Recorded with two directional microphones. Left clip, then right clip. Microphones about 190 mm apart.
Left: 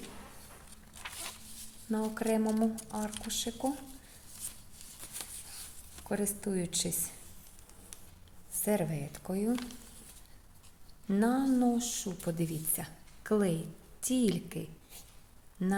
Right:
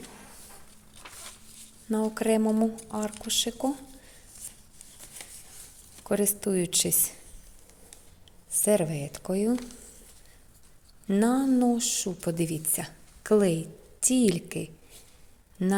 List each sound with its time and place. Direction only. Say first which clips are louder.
1.9 s speech: right 6 dB; 45° right (ahead or behind)
6.1 s speech: right 8 dB; 45° right (ahead or behind)
8.5 s speech: right 8 dB; 40° right (ahead or behind)
11.1 s speech: right 5 dB; 45° right (ahead or behind)